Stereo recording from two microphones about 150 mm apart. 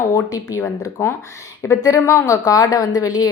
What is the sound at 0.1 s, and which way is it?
A woman's voice, 25° left (ahead or behind).